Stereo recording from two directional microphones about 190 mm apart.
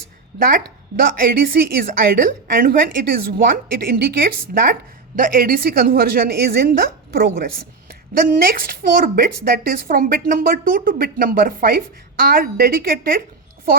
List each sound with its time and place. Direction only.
0.4 s speech: 50° right (ahead or behind)